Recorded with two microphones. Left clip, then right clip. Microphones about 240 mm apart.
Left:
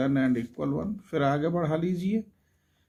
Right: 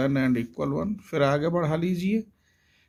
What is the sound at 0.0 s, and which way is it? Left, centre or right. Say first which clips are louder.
Speech: right 1 dB; right.